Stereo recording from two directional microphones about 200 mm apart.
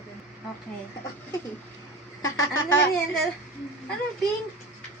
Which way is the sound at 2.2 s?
85° left.